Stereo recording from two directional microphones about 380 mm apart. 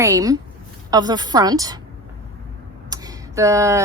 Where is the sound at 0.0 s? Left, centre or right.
Centre.